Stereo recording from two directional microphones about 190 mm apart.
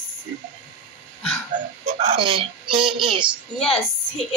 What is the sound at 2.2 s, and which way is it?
Speech, 25° right (ahead or behind).